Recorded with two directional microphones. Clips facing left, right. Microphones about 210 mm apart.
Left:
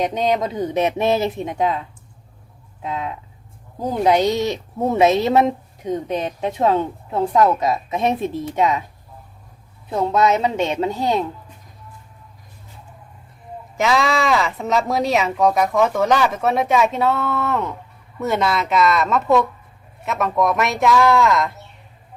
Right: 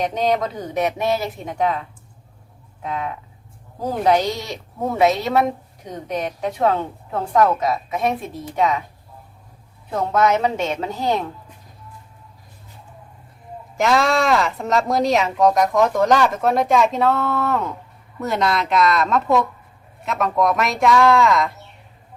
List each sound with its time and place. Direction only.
0.0 s speech: 20° left (ahead or behind)
2.8 s speech: 20° left (ahead or behind)
9.9 s speech: 20° left (ahead or behind)
13.7 s speech: centre (ahead or behind)